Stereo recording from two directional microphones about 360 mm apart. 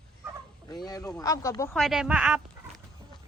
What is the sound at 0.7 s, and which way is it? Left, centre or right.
Speech, centre.